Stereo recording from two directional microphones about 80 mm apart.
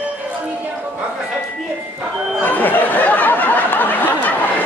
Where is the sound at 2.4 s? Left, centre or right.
Left.